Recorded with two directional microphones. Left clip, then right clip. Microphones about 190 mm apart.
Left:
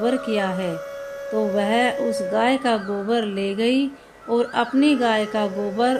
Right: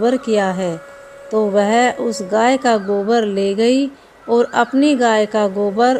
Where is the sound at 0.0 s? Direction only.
35° right (ahead or behind).